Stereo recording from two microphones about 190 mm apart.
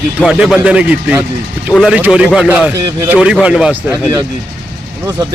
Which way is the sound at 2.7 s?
15° right (ahead or behind).